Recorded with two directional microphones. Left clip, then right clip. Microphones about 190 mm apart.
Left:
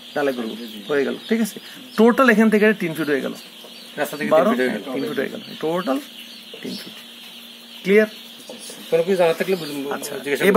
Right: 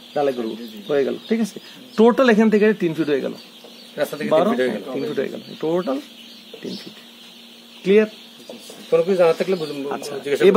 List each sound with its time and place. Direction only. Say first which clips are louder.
0.8 s speech: right 1 dB; 40° right (ahead or behind)
7.8 s speech: even; 40° right (ahead or behind)